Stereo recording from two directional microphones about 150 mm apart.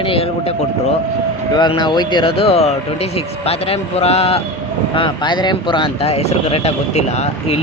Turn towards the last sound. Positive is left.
turn(degrees=45)  # may be behind; listen again after turning